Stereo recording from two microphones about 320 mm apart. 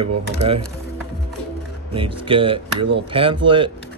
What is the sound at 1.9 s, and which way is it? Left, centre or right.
Speech, centre.